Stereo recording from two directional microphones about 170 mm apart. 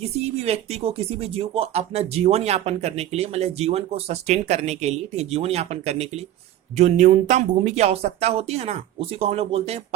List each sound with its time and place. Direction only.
0.0 s speech: 40° right (ahead or behind)